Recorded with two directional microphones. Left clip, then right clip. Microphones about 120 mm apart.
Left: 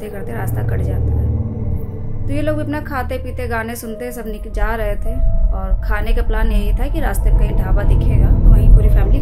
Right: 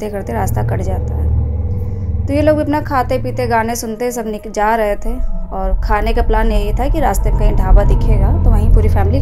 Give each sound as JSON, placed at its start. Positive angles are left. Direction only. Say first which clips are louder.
{"t": 0.0, "sound": "a woman's voice", "louder": "right 7 dB", "side_deg": -45}
{"t": 2.2, "sound": "a woman's voice", "louder": "right 8 dB", "side_deg": -45}